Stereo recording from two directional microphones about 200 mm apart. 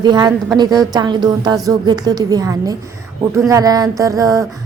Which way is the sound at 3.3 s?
15° right (ahead or behind).